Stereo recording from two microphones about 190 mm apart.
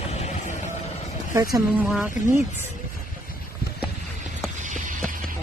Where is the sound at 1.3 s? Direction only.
15° right (ahead or behind).